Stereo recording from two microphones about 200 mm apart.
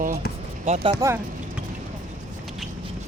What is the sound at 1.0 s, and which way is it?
Speech, 15° right (ahead or behind).